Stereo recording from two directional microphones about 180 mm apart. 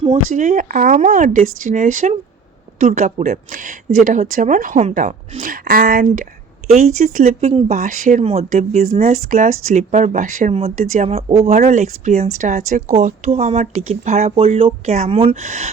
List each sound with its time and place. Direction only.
0.3 s a woman's voice: 50° right (ahead or behind)
6.7 s speech: 40° right (ahead or behind)